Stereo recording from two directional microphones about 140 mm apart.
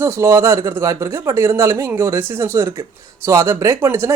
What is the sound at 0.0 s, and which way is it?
Speech, 20° right (ahead or behind).